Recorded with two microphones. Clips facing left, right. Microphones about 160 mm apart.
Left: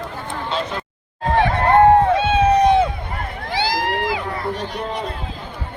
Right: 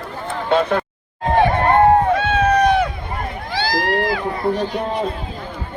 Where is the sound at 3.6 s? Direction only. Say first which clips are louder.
Right 3 dB; 20° left (ahead or behind).